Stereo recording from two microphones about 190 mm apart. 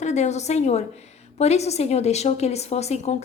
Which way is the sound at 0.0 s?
35° left (ahead or behind).